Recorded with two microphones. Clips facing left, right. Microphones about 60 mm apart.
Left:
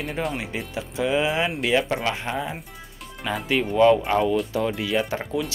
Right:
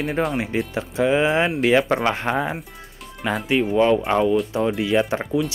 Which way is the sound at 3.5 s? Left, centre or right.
Centre.